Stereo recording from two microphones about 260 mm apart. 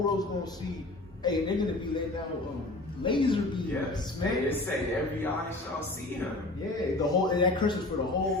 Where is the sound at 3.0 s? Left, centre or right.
Centre.